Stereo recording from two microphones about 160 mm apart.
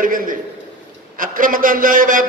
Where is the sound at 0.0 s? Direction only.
60° right (ahead or behind).